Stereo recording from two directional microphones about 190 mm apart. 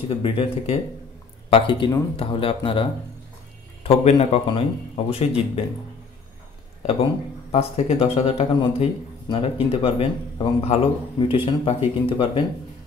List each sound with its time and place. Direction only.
0.1 s a man's voice: 30° left (ahead or behind)
7.5 s a man's voice: 35° left (ahead or behind)